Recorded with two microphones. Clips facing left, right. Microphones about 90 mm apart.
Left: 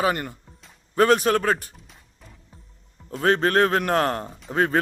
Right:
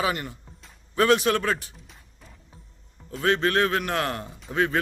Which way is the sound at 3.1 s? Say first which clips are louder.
Left 3 dB; 40° left (ahead or behind).